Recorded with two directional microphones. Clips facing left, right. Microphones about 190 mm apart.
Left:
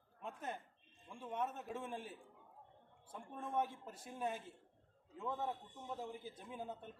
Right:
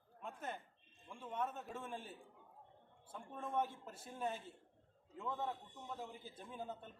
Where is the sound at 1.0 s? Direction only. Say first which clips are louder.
Left 1 dB; 10° left (ahead or behind).